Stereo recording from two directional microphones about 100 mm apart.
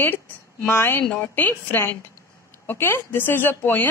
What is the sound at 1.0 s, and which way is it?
A woman's voice, 10° left (ahead or behind).